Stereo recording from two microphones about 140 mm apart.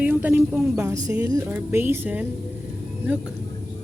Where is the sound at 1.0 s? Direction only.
25° right (ahead or behind).